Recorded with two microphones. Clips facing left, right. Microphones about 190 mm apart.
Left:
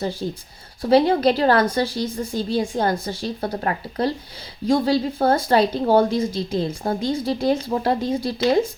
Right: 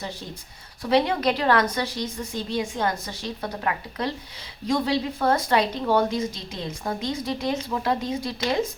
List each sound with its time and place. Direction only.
0.8 s a woman's voice: 30° left (ahead or behind)